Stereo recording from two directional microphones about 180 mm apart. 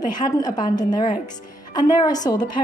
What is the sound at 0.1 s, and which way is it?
A woman's voice, 25° left (ahead or behind).